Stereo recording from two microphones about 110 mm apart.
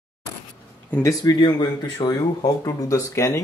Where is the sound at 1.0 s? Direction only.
40° left (ahead or behind).